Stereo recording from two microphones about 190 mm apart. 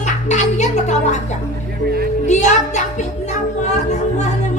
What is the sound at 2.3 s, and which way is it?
Speech, 40° left (ahead or behind).